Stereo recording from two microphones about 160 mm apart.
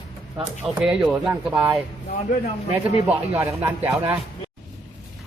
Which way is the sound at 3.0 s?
10° right (ahead or behind).